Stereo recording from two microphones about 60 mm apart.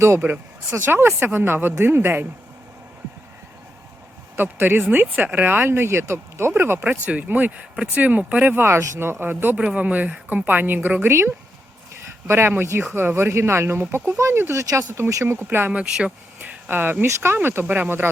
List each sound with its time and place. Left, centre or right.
0.2 s speech: right
4.4 s speech: right
6.8 s speech: right
8.5 s speech: right
12.3 s speech: right
13.8 s speech: right
14.1 s speech: right
14.6 s speech: right
15.2 s speech: right
15.7 s speech: centre
16.6 s speech: right